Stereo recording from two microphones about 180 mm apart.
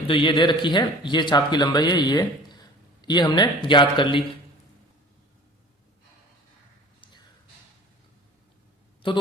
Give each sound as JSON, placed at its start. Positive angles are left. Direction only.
{"t": 0.1, "sound": "speech", "side_deg": 25}
{"t": 9.0, "sound": "speech", "side_deg": 30}